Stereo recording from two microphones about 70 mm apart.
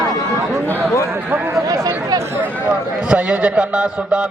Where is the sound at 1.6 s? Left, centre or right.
Right.